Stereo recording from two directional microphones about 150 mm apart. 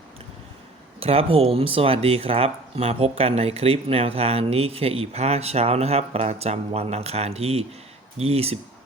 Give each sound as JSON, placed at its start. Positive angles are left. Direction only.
{"t": 0.9, "sound": "speech", "side_deg": -40}